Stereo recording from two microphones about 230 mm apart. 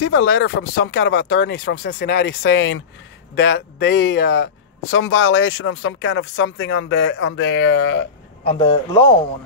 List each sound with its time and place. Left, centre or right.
0.0 s speech: left
8.5 s a man's voice: left